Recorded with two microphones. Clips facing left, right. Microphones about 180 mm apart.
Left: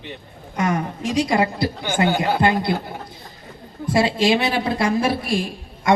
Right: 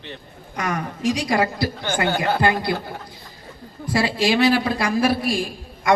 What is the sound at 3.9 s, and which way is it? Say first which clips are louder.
A woman's voice: left 3 dB; 25° left (ahead or behind).